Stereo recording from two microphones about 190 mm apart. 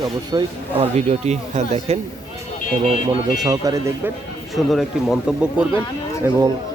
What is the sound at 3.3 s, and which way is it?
Speech, 20° right (ahead or behind).